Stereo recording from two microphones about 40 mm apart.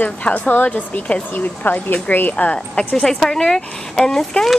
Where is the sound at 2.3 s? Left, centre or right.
Left.